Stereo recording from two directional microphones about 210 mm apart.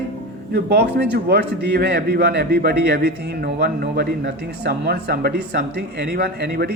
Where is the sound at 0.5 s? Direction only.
50° right (ahead or behind).